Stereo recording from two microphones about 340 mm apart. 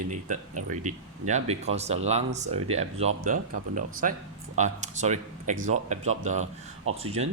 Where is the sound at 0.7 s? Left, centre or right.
Right.